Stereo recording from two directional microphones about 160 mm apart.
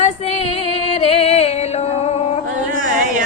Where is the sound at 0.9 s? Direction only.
40° left (ahead or behind).